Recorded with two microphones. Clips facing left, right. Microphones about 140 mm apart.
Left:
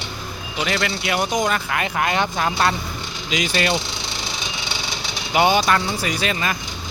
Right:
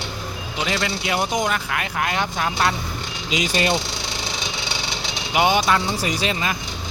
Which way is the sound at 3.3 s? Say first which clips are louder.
Even; 25° right (ahead or behind).